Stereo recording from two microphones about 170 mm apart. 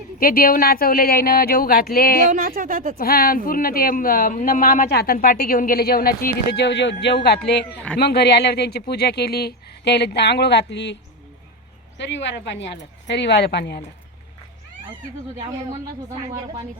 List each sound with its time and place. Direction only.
0.2 s speech: 55° left (ahead or behind)
2.3 s speech: 55° right (ahead or behind)
3.0 s speech: 60° left (ahead or behind); by 10.9 s 90° left
11.9 s speech: 90° left